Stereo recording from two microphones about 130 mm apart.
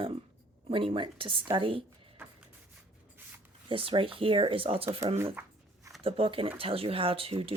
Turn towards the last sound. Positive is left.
turn(degrees=-45)  # may be behind; listen again after turning